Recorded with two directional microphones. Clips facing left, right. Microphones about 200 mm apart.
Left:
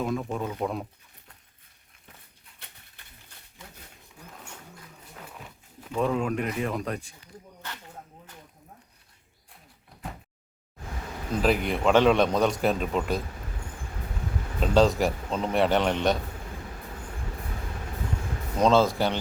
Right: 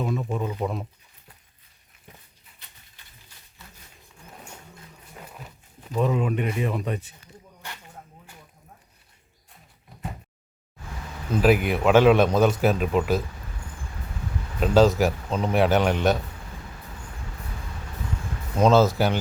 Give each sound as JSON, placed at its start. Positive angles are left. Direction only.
{"t": 0.0, "sound": "a man's voice", "side_deg": -5}
{"t": 2.6, "sound": "a sound", "side_deg": 60}
{"t": 5.1, "sound": "speech", "side_deg": -5}
{"t": 7.6, "sound": "a sound", "side_deg": -15}
{"t": 11.4, "sound": "a man's voice", "side_deg": -5}
{"t": 14.6, "sound": "a man's voice", "side_deg": -5}
{"t": 18.6, "sound": "a man's voice", "side_deg": -5}